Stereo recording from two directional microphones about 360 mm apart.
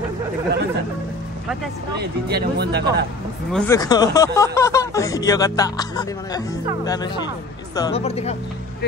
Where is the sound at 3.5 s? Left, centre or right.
Centre.